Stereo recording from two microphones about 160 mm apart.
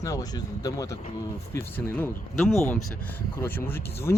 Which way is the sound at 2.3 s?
Centre (ahead or behind).